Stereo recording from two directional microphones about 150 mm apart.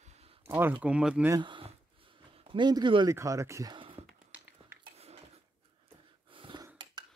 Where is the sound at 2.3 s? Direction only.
35° right (ahead or behind).